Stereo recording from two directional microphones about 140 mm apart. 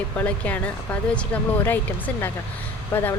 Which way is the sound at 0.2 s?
10° left (ahead or behind).